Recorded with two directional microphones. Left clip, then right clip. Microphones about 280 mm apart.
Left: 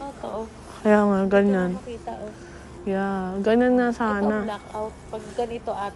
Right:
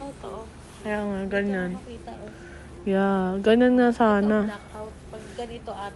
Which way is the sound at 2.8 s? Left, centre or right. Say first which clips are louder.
Right 3 dB; centre.